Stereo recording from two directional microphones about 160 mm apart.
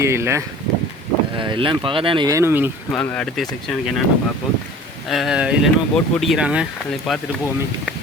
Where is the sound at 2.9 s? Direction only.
5° left (ahead or behind).